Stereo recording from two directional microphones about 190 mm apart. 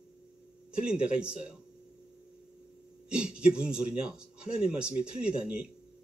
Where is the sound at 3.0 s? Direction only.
5° right (ahead or behind).